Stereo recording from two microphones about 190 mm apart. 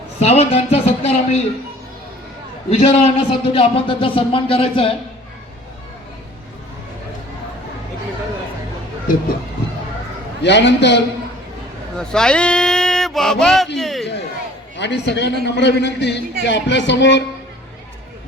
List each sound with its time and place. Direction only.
0.2 s speech: 35° left (ahead or behind)
2.6 s a man's voice: 35° left (ahead or behind)
10.4 s a man's voice: 65° left (ahead or behind)
11.9 s speech: 5° left (ahead or behind)
13.7 s a sound: centre (ahead or behind)
14.8 s a man's voice: 65° left (ahead or behind)